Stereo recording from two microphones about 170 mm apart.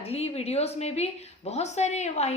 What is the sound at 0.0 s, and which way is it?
A woman's voice, 35° left (ahead or behind).